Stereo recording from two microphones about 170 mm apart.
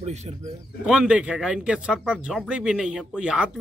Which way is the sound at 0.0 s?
40° right (ahead or behind).